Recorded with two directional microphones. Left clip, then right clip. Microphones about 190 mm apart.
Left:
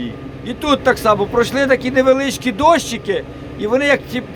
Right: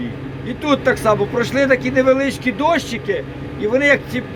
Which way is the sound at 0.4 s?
20° left (ahead or behind).